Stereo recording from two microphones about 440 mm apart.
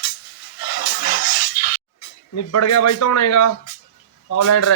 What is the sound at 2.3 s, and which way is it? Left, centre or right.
Speech, left.